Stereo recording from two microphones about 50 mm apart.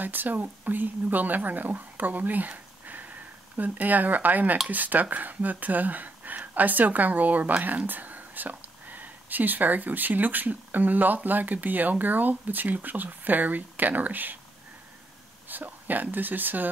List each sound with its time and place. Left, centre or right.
0.0 s speech: right
15.4 s speech: right